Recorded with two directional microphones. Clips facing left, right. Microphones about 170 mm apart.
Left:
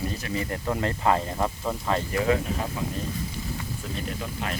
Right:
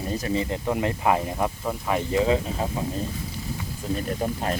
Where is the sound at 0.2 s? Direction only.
25° right (ahead or behind); by 2.0 s 5° right (ahead or behind).